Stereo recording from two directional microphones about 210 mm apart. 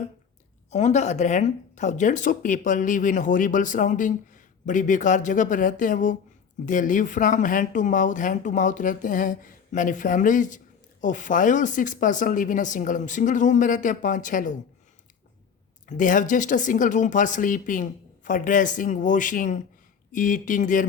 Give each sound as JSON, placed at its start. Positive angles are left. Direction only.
{"t": 0.7, "sound": "speech", "side_deg": 30}
{"t": 15.9, "sound": "speech", "side_deg": 40}